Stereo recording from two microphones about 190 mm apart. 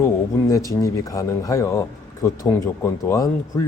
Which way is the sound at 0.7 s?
15° left (ahead or behind).